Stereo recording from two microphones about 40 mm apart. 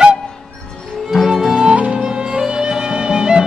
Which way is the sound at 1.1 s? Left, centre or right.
Centre.